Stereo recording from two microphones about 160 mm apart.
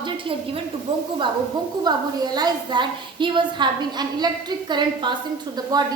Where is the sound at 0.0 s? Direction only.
35° right (ahead or behind).